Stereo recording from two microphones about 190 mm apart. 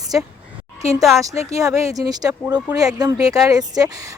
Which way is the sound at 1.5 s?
15° right (ahead or behind).